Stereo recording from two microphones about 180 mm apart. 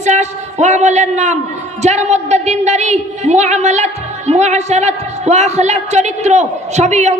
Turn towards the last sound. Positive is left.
turn(degrees=-40)  # may be behind; listen again after turning